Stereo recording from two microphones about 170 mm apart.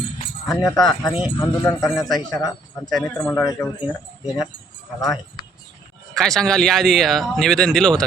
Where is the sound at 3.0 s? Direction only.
5° left (ahead or behind).